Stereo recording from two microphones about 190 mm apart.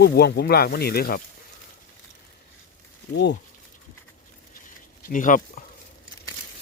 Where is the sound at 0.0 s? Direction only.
55° left (ahead or behind).